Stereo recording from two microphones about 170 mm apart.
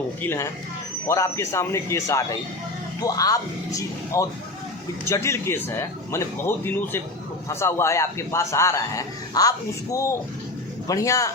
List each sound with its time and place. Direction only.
0.2 s a man's voice: 15° left (ahead or behind)